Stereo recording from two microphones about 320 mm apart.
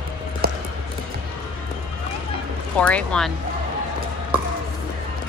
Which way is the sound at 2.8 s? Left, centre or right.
Centre.